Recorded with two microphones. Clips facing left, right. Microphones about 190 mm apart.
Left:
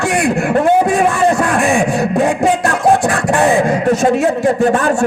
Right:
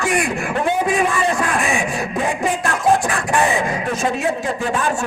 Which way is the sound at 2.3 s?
70° left (ahead or behind).